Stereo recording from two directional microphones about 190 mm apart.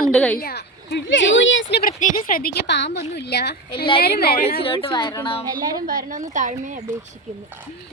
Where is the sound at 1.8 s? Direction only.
45° left (ahead or behind).